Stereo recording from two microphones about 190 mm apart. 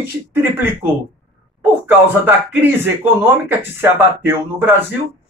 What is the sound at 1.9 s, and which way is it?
Speech, 10° right (ahead or behind).